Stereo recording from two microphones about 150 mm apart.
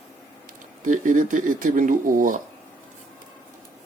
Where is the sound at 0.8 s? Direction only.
60° right (ahead or behind).